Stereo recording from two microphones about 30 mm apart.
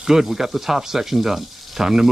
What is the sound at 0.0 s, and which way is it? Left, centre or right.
Speech, centre.